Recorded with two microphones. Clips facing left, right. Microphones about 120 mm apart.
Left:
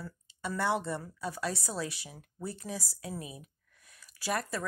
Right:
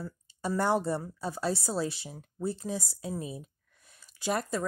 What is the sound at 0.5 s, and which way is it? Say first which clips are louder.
Speech: right 4 dB; 40° right (ahead or behind).